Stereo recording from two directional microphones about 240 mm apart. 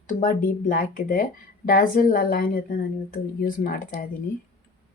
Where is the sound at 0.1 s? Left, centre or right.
Left.